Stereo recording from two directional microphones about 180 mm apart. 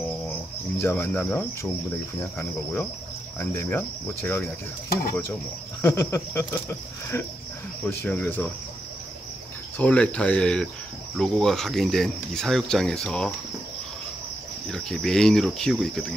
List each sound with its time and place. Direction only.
0.7 s speech: 10° left (ahead or behind)
4.8 s speech: 55° left (ahead or behind)
5.8 s speech: 15° left (ahead or behind)
9.8 s speech: 5° left (ahead or behind)
14.7 s speech: centre (ahead or behind)